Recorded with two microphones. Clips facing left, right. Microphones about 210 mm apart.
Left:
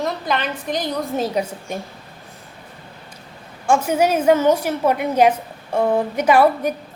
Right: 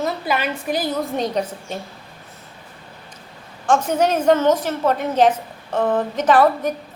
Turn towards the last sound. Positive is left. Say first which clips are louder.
# left 1 dB
turn(degrees=10)  # may be behind; listen again after turning